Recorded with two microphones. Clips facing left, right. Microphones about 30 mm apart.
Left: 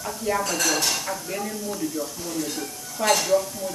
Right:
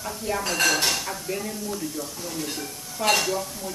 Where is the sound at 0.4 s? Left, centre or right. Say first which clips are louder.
Right 4 dB; right.